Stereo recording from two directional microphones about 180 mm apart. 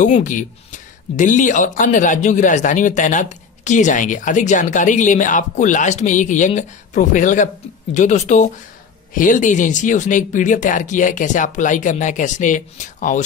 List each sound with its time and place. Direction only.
0.0 s speech: 45° left (ahead or behind)